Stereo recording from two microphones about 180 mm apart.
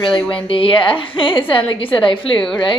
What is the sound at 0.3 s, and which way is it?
A woman's voice, 30° left (ahead or behind).